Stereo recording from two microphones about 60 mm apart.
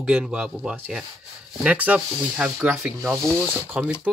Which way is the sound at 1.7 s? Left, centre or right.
Right.